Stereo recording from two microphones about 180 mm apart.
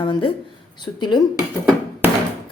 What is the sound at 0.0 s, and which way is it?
Speech, 30° left (ahead or behind).